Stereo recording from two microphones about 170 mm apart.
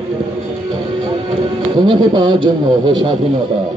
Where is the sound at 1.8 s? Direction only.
30° right (ahead or behind).